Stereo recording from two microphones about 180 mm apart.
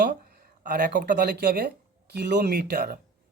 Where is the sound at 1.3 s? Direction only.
65° right (ahead or behind).